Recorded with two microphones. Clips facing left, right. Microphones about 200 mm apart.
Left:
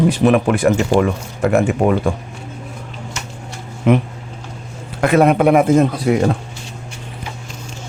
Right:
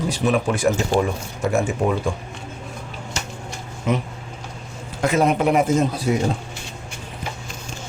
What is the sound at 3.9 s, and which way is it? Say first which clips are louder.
Speech: left 8 dB; 60° left (ahead or behind).